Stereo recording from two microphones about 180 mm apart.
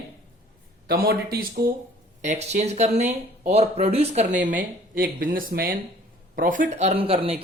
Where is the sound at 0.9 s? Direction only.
60° right (ahead or behind).